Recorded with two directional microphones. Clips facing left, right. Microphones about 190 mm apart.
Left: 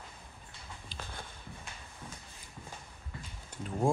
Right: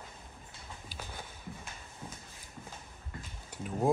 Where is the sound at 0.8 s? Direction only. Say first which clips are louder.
Even; 5° right (ahead or behind).